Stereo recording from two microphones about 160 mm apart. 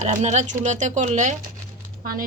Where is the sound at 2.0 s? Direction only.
65° right (ahead or behind).